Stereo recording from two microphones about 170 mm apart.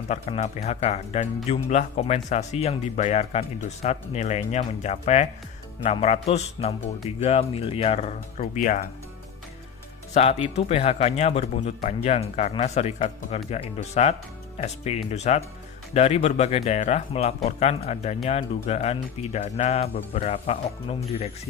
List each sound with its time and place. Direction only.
0.1 s speech: 40° left (ahead or behind)
10.1 s speech: 40° left (ahead or behind)